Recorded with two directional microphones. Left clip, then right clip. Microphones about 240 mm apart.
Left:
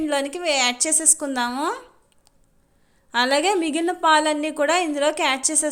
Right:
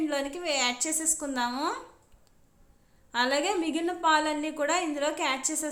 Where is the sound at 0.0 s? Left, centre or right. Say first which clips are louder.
Left 7 dB; left.